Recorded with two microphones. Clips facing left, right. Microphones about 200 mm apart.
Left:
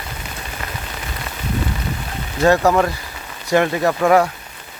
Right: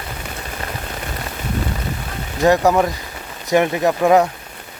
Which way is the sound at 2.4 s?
15° right (ahead or behind).